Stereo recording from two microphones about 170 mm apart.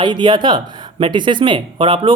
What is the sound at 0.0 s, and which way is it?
Speech, 25° right (ahead or behind).